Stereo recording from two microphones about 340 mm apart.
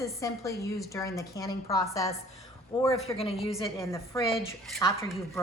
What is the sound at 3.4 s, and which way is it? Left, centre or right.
A woman's voice, centre.